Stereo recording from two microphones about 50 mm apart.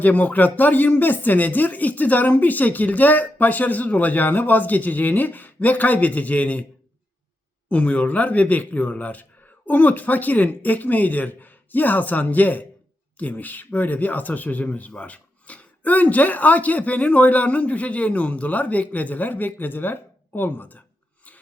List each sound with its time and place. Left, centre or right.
0.0 s speech: left
7.7 s speech: left